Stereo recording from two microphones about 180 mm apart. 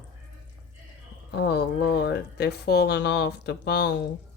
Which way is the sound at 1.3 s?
65° left (ahead or behind).